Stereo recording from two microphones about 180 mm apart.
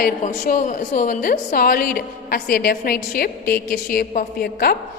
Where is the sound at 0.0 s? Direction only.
50° left (ahead or behind).